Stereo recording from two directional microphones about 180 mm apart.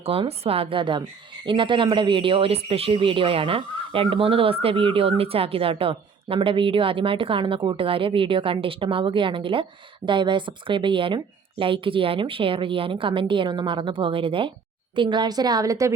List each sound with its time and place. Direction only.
0.0 s a woman's voice: 35° right (ahead or behind)